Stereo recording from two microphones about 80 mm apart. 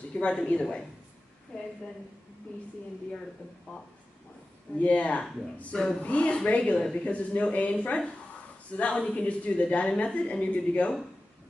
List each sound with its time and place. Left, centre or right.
0.1 s speech: centre
4.7 s speech: centre